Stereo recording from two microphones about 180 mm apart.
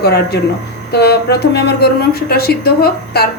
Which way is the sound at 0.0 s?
65° left (ahead or behind).